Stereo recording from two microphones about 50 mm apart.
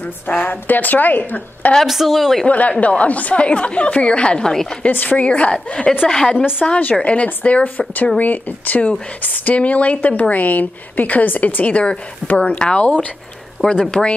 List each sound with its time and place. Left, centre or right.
0.0 s speech: left
1.9 s speech: centre
2.4 s a woman's voice: left
4.5 s a woman's voice: centre
4.9 s a woman's voice: left
6.6 s a woman's voice: left